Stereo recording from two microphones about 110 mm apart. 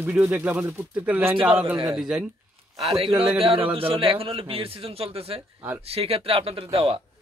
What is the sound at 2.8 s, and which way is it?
A man's voice, 60° right (ahead or behind).